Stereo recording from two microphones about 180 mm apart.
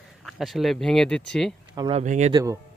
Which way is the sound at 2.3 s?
20° right (ahead or behind).